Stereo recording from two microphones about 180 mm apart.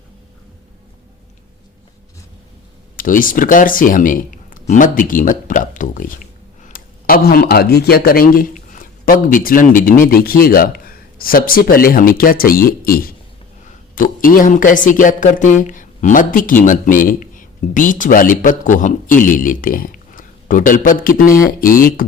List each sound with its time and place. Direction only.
2.9 s a man's voice: 50° left (ahead or behind)